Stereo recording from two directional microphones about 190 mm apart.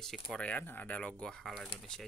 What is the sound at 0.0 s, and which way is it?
Speech, 5° left (ahead or behind).